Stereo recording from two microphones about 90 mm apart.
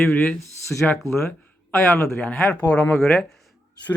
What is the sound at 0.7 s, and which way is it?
Speech, 10° left (ahead or behind).